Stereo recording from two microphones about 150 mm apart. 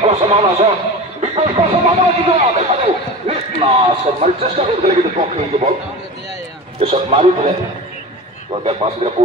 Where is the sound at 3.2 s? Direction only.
50° right (ahead or behind).